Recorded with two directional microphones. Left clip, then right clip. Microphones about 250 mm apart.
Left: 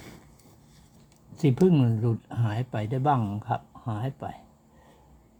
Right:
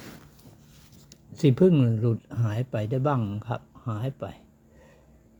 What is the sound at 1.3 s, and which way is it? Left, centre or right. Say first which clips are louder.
Speech: right 2 dB; centre.